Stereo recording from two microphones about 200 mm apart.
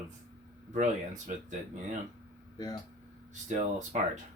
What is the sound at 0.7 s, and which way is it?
Speech, 35° right (ahead or behind).